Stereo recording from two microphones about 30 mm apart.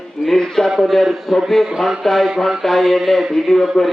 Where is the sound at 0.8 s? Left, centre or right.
Centre.